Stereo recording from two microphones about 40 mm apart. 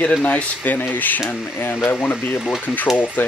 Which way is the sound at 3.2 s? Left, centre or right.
Left.